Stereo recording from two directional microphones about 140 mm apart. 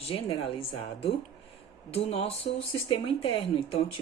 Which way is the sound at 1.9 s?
45° left (ahead or behind).